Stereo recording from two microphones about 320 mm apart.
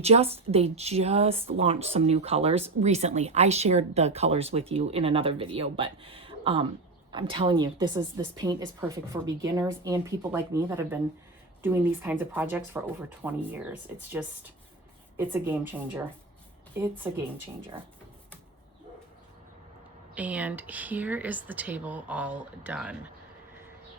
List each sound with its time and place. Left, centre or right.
0.0 s a woman's voice: centre
20.1 s speech: centre